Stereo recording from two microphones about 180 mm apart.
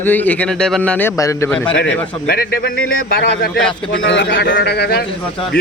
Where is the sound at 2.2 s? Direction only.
60° left (ahead or behind).